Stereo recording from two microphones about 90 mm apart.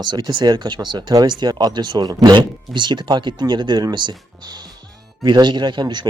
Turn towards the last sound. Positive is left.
turn(degrees=-55)  # may be behind; listen again after turning